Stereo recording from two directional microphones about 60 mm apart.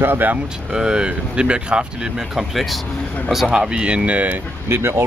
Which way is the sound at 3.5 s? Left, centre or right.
Centre.